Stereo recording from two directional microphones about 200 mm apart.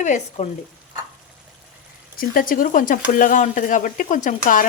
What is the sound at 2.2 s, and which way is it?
Speech, 45° left (ahead or behind).